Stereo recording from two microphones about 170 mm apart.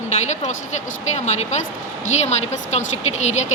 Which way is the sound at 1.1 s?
40° left (ahead or behind).